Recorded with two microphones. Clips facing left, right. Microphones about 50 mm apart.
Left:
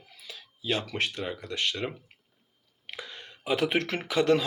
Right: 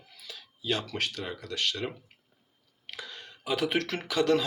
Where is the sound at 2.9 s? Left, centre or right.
Left.